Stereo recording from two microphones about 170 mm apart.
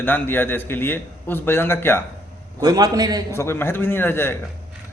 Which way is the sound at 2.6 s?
25° right (ahead or behind).